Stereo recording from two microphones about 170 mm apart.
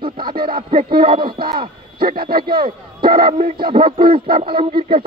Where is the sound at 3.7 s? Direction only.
30° right (ahead or behind).